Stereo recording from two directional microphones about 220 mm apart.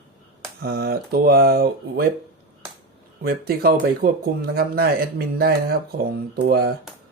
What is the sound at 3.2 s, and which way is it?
Speech, 45° right (ahead or behind).